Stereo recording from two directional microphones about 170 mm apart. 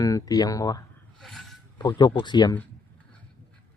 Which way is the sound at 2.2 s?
25° left (ahead or behind).